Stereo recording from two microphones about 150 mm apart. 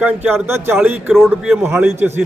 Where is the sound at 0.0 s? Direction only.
15° right (ahead or behind).